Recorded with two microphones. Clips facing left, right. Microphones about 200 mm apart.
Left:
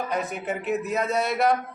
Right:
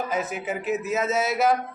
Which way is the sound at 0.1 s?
Centre (ahead or behind).